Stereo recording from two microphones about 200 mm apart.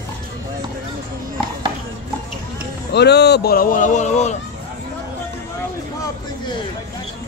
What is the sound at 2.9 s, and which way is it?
A man's voice, 55° left (ahead or behind).